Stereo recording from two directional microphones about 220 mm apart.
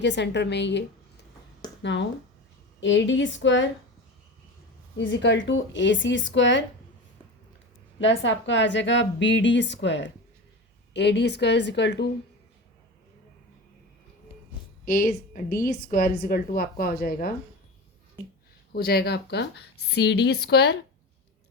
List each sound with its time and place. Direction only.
0.0 s a woman's voice: 50° left (ahead or behind)
4.9 s a woman's voice: 55° left (ahead or behind)
7.9 s a woman's voice: 55° left (ahead or behind)
14.8 s a woman's voice: 40° left (ahead or behind)
18.7 s speech: 45° left (ahead or behind)